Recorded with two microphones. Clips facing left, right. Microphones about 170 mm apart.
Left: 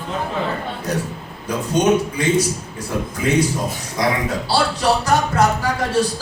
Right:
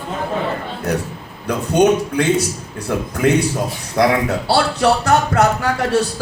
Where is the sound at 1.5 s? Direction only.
65° right (ahead or behind).